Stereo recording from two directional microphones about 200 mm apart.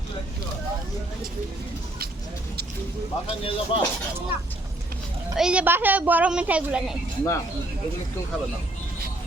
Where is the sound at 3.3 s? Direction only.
25° left (ahead or behind).